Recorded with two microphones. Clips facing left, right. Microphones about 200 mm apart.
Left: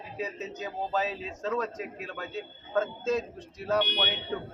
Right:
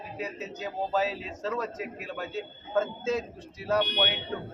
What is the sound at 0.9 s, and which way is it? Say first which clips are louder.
A man's voice: right 2 dB; 5° right (ahead or behind).